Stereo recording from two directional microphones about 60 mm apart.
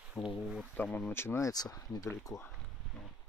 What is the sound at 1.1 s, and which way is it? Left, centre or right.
Speech, left.